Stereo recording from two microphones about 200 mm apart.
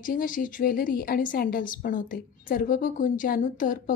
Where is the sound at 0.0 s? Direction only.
45° left (ahead or behind).